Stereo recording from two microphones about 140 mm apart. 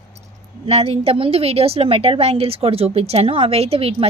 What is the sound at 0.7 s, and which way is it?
A woman's voice, 45° right (ahead or behind).